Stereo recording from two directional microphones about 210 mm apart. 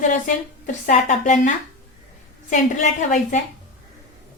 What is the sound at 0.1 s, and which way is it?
A woman's voice, 35° left (ahead or behind).